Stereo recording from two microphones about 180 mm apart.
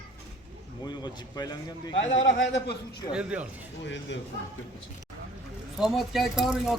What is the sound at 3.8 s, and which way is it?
Speech, 90° left.